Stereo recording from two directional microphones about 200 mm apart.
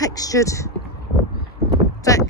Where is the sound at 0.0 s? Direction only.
15° left (ahead or behind).